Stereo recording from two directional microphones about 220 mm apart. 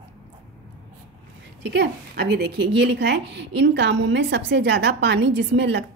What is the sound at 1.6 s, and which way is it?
A woman's voice, 50° right (ahead or behind).